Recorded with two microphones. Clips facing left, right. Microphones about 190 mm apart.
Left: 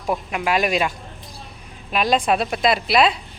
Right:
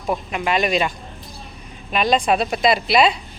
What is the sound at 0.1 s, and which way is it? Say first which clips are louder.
A woman's voice: even; 5° left (ahead or behind).